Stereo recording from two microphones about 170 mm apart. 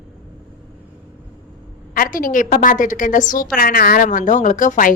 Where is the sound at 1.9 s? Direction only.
55° left (ahead or behind).